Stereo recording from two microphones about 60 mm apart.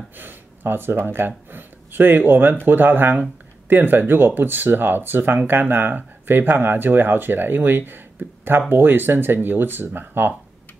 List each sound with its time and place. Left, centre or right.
0.2 s speech: right